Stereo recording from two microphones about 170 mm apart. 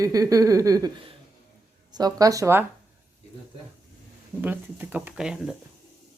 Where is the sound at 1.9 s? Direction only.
25° right (ahead or behind).